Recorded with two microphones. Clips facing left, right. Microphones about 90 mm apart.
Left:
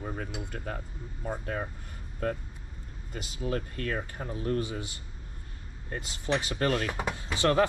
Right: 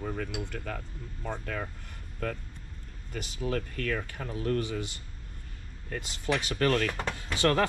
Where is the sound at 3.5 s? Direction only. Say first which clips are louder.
Even; 25° left (ahead or behind).